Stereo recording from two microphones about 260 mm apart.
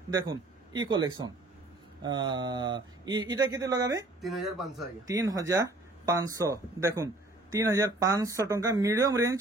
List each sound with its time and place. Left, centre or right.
0.8 s speech: centre
4.2 s speech: centre
5.0 s speech: centre